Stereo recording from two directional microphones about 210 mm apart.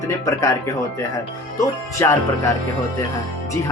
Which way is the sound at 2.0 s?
15° left (ahead or behind).